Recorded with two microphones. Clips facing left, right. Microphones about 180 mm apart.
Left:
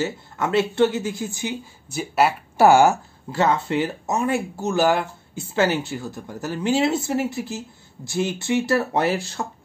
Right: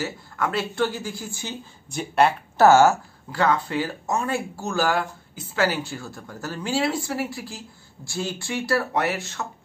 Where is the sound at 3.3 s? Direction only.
25° left (ahead or behind).